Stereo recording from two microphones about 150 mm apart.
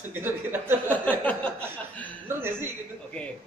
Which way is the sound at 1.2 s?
10° left (ahead or behind).